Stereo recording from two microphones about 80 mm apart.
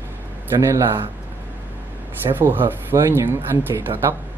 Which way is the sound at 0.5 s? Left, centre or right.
Right.